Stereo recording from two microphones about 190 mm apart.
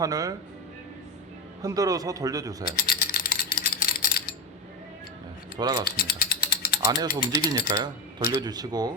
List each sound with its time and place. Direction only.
0.0 s speech: 20° right (ahead or behind)
1.6 s speech: 20° right (ahead or behind)
2.7 s typing: 55° left (ahead or behind)
5.5 s speech: 20° right (ahead or behind)
5.8 s ratchet: 55° left (ahead or behind)
6.8 s speech: 20° right (ahead or behind)